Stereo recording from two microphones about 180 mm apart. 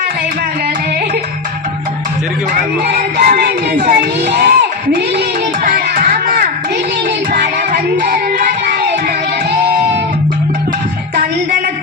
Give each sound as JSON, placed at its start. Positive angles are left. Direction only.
{"t": 2.8, "sound": "music", "side_deg": -60}
{"t": 3.9, "sound": "a sound", "side_deg": -65}
{"t": 5.6, "sound": "music", "side_deg": -50}
{"t": 7.3, "sound": "music", "side_deg": -65}
{"t": 9.5, "sound": "music", "side_deg": -70}